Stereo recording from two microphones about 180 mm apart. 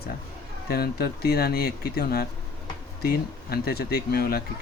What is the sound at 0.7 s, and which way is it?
Speech, 60° left (ahead or behind).